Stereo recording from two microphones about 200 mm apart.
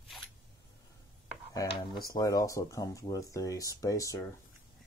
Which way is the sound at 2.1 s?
20° left (ahead or behind).